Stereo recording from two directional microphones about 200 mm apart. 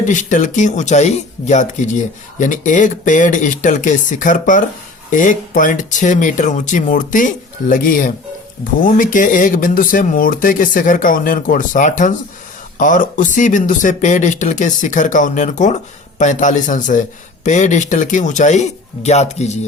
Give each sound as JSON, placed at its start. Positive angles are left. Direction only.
{"t": 0.0, "sound": "speech", "side_deg": 40}